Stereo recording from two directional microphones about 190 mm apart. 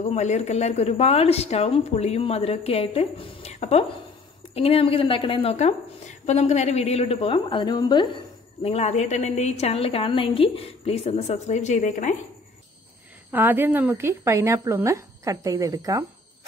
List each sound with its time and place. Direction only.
0.0 s a woman's voice: 35° left (ahead or behind)
8.6 s a woman's voice: 35° left (ahead or behind)
13.3 s a woman's voice: 10° right (ahead or behind)